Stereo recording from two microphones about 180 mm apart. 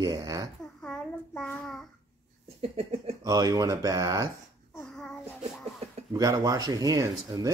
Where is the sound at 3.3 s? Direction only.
20° right (ahead or behind).